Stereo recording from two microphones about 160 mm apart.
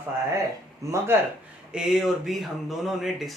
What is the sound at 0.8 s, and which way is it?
Speech, 20° right (ahead or behind).